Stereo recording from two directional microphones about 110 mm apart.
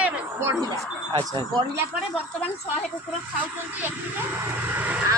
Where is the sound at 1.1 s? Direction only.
45° right (ahead or behind).